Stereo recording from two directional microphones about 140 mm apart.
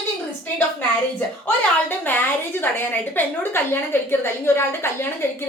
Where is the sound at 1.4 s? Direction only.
15° left (ahead or behind).